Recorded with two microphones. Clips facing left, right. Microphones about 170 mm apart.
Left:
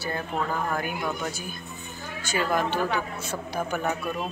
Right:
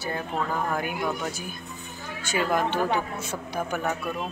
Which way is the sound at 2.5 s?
20° right (ahead or behind).